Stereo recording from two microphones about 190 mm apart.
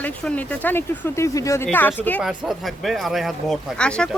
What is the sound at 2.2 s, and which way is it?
Speech, centre (ahead or behind).